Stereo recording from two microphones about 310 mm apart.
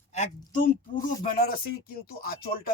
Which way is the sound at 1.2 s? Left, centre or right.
Left.